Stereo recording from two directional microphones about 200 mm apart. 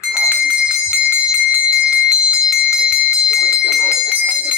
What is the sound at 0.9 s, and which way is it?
Bell, 5° right (ahead or behind).